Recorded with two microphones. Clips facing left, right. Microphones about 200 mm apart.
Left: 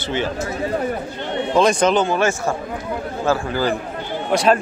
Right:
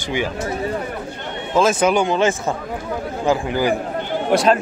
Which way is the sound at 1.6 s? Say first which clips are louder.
Even; 5° right (ahead or behind).